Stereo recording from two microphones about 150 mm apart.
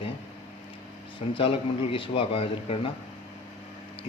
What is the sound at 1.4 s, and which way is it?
Speech, 35° left (ahead or behind).